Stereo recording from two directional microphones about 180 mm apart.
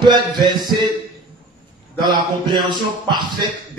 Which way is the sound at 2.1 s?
25° right (ahead or behind).